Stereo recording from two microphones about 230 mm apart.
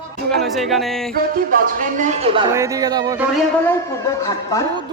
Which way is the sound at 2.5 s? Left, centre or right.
Centre.